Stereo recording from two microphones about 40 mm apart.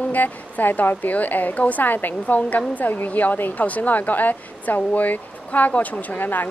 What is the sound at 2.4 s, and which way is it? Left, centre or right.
A woman's voice, left.